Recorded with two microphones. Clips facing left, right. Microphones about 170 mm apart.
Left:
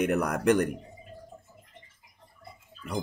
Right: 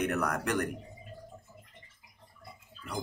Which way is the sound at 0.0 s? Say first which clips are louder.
Left 6 dB; 15° left (ahead or behind).